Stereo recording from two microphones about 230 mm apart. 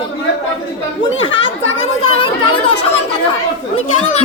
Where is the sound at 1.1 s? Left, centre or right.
Left.